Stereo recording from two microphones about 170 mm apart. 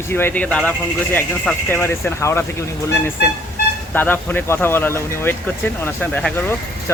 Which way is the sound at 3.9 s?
10° left (ahead or behind).